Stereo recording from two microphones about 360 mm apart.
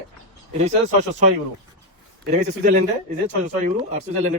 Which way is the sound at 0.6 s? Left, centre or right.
Centre.